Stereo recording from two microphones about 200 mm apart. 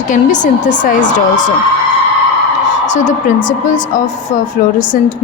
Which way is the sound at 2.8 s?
40° left (ahead or behind).